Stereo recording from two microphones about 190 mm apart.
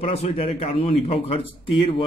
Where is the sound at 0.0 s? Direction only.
30° left (ahead or behind).